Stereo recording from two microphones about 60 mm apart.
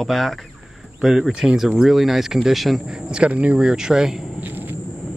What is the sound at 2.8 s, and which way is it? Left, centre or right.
Speech, centre.